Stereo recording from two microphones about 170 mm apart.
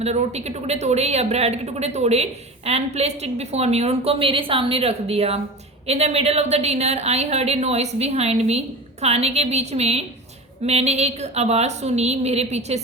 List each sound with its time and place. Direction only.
0.0 s a woman's voice: 40° right (ahead or behind)